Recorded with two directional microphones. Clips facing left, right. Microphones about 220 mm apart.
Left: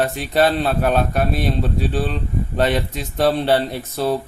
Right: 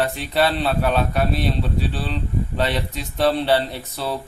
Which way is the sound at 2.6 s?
50° left (ahead or behind).